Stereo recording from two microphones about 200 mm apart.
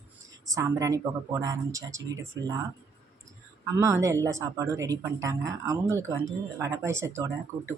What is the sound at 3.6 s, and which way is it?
Speech, 15° right (ahead or behind).